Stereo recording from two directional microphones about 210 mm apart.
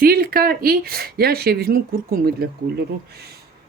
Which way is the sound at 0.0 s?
45° right (ahead or behind).